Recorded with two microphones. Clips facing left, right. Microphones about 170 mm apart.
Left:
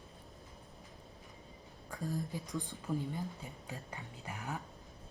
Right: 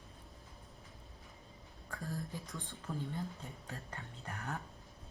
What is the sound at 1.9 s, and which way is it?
Speech, 15° left (ahead or behind).